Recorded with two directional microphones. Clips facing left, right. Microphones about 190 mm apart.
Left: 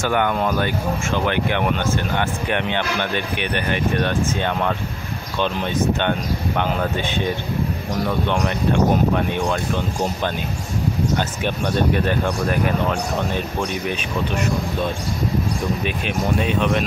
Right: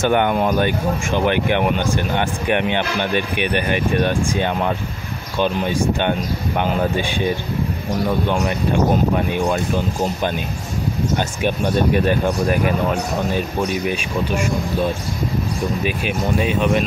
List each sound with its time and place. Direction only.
0.0 s speech: 20° right (ahead or behind)
9.1 s speech: 10° right (ahead or behind)
11.4 s speech: 10° right (ahead or behind)
16.3 s speech: 5° right (ahead or behind)